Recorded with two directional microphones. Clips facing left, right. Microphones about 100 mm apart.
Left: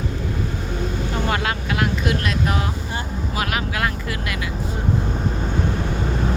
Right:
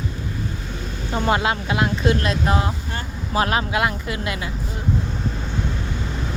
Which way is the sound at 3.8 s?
20° right (ahead or behind).